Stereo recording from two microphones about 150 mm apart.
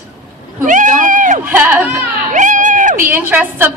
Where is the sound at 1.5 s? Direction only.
10° right (ahead or behind).